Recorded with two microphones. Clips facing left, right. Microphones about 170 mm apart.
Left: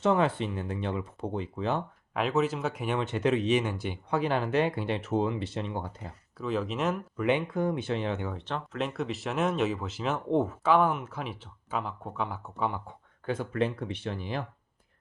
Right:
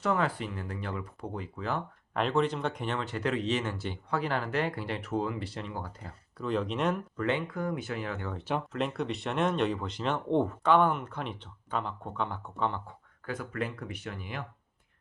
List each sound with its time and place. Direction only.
0.0 s speech: 25° left (ahead or behind)
2.1 s speech: 5° left (ahead or behind)
3.0 s speech: 20° left (ahead or behind)
6.4 s speech: 5° left (ahead or behind)
7.3 s speech: 20° left (ahead or behind)
8.7 s speech: centre (ahead or behind)
13.2 s speech: 25° left (ahead or behind)